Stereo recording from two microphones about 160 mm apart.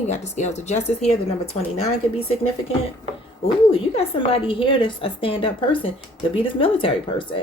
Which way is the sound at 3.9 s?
35° left (ahead or behind).